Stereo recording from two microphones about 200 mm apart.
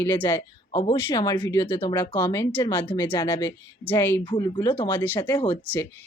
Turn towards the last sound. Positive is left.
turn(degrees=10)  # may be behind; listen again after turning